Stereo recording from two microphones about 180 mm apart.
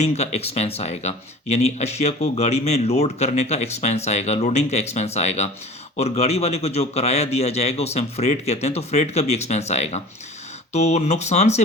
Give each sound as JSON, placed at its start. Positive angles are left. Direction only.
{"t": 0.0, "sound": "speech", "side_deg": 40}